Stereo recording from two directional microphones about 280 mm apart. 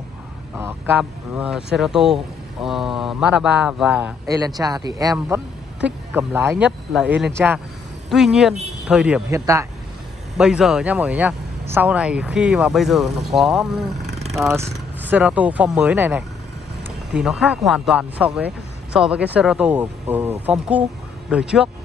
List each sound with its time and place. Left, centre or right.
0.6 s speech: centre
14.0 s vehicle: right
14.3 s speech: centre